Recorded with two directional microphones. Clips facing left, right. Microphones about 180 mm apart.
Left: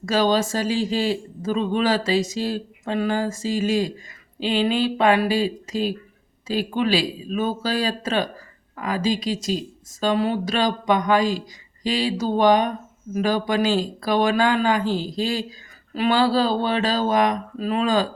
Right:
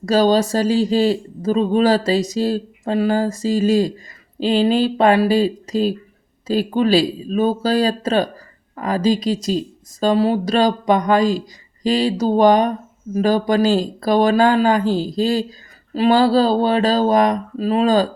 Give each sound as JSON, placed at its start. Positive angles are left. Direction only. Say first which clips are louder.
{"t": 0.0, "sound": "speech", "louder": "right 5 dB", "side_deg": -40}